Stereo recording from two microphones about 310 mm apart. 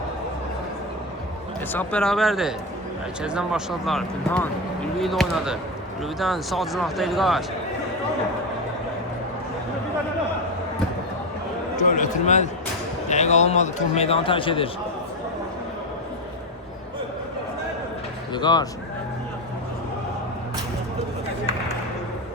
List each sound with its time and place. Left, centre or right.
1.7 s speech: centre
11.8 s a sound: left
13.1 s a man's voice: left
18.3 s speech: centre